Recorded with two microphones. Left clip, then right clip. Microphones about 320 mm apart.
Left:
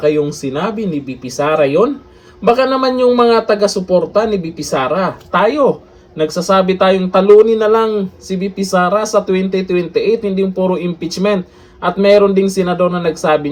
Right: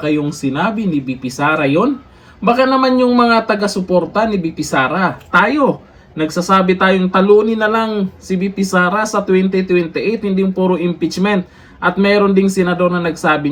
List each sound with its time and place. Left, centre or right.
0.0 s a man's voice: centre